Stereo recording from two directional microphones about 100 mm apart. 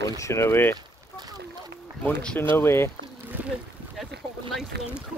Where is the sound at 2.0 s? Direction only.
10° left (ahead or behind).